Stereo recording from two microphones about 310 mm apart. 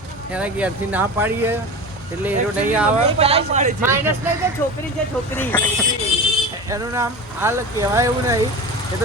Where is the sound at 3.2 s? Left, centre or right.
Centre.